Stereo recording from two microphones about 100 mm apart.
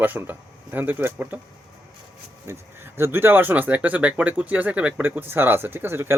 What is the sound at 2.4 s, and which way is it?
Speech, 25° right (ahead or behind).